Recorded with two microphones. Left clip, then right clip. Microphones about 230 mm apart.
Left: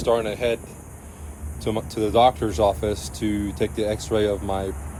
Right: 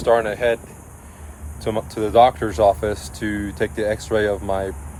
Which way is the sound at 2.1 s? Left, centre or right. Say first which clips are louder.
Right 4 dB; right.